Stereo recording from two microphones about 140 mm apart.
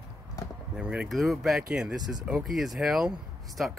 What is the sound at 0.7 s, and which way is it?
Speech, 5° right (ahead or behind).